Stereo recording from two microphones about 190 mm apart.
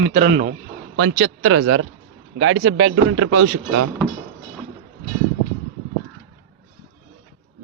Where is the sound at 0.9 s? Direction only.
90° right.